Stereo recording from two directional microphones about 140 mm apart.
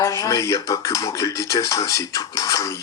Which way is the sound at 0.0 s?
25° left (ahead or behind).